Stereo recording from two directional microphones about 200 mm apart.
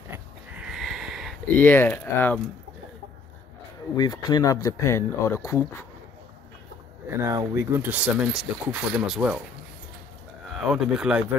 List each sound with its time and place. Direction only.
0.1 s a sound: 5° right (ahead or behind)
1.6 s speech: 10° left (ahead or behind)
3.9 s speech: 20° left (ahead or behind)
7.1 s speech: 15° right (ahead or behind)
10.6 s speech: 5° right (ahead or behind)